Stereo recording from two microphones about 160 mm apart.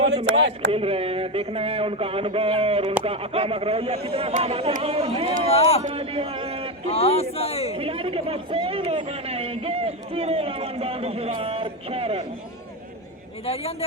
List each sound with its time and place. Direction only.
0.7 s a man's voice: 35° right (ahead or behind)
5.5 s a man's voice: 40° left (ahead or behind)
5.8 s a man's voice: 35° right (ahead or behind)
6.8 s a man's voice: 40° left (ahead or behind)
7.8 s a man's voice: 35° right (ahead or behind)
13.4 s a man's voice: 40° left (ahead or behind)